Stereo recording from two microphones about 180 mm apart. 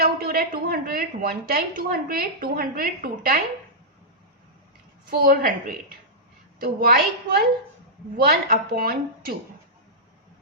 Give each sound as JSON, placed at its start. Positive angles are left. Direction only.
{"t": 0.0, "sound": "a woman's voice", "side_deg": -55}
{"t": 5.0, "sound": "a woman's voice", "side_deg": -55}